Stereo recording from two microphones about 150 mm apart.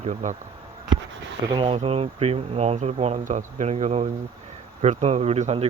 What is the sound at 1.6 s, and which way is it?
Speech, 40° right (ahead or behind).